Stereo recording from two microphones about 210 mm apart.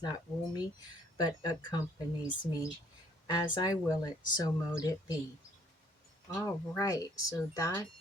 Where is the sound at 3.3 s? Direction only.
20° left (ahead or behind).